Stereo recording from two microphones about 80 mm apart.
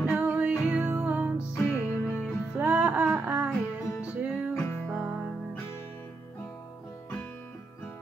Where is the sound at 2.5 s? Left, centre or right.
Centre.